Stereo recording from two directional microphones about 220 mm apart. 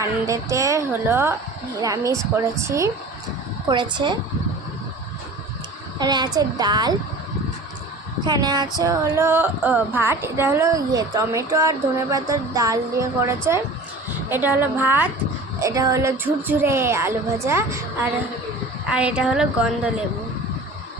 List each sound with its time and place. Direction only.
0.0 s a woman's voice: 15° right (ahead or behind)
6.0 s a woman's voice: 20° right (ahead or behind)
8.3 s a woman's voice: 20° right (ahead or behind); by 19.9 s 5° right (ahead or behind)